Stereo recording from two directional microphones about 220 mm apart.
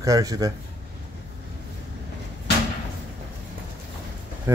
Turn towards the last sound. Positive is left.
turn(degrees=-15)  # may be behind; listen again after turning